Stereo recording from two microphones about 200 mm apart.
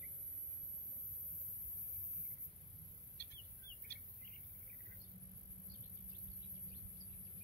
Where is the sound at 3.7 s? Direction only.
15° left (ahead or behind).